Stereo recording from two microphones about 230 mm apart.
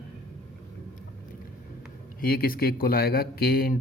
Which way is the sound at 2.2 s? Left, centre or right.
Left.